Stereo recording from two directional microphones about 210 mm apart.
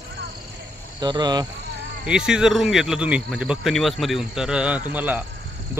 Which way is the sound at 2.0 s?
5° right (ahead or behind).